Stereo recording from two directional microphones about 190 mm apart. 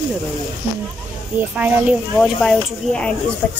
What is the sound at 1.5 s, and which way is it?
Speech, 5° right (ahead or behind).